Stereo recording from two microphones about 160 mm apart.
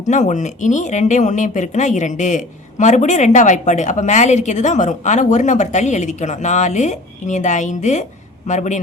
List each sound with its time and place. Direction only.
0.1 s speech: 50° left (ahead or behind)